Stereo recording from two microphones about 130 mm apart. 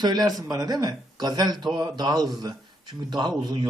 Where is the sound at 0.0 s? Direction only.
30° right (ahead or behind).